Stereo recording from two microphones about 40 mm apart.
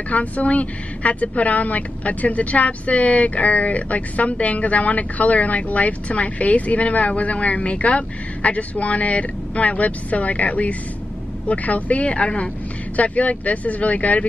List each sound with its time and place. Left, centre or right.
0.1 s a woman's voice: left